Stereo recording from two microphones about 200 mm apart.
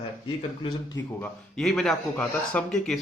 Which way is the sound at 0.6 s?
20° left (ahead or behind).